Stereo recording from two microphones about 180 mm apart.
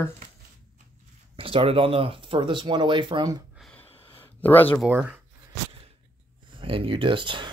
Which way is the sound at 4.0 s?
10° left (ahead or behind).